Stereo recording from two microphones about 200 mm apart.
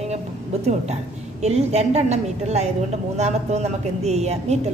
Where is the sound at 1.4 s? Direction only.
35° right (ahead or behind).